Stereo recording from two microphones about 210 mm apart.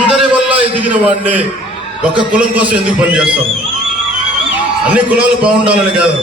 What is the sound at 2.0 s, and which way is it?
A man's voice, 5° right (ahead or behind).